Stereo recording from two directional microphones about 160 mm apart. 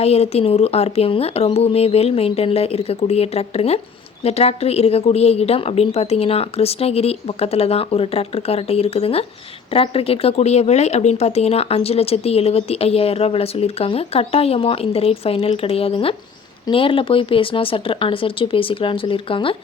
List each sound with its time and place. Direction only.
0.0 s speech: 40° left (ahead or behind)